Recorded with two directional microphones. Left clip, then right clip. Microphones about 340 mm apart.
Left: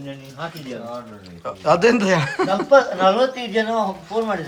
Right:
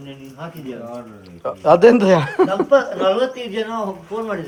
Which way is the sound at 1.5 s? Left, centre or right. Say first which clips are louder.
Right 5 dB; centre.